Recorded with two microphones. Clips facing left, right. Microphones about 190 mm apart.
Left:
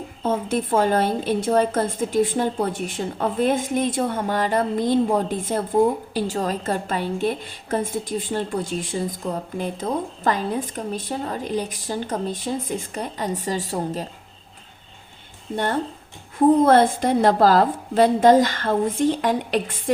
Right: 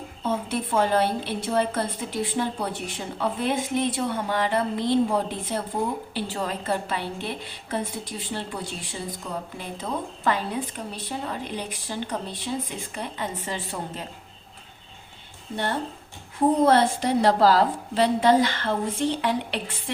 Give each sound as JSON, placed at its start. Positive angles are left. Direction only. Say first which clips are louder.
{"t": 0.2, "sound": "a woman's voice", "louder": "left 4 dB", "side_deg": 45}
{"t": 16.6, "sound": "a woman's voice", "louder": "left 4 dB", "side_deg": 50}